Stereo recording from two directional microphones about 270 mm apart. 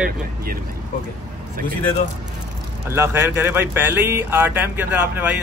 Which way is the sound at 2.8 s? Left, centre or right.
Centre.